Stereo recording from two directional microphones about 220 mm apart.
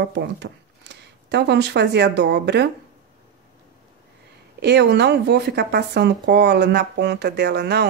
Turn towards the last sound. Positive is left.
turn(degrees=-50)  # may be behind; listen again after turning